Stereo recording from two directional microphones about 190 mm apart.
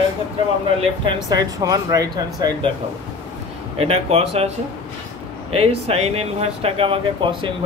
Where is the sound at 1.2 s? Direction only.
20° right (ahead or behind).